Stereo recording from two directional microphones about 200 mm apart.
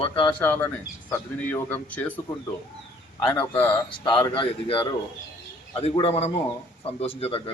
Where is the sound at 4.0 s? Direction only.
25° left (ahead or behind).